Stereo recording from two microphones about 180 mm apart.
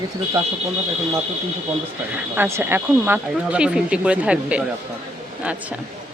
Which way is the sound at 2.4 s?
15° right (ahead or behind).